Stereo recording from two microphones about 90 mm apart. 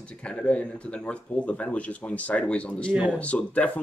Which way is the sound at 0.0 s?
10° left (ahead or behind).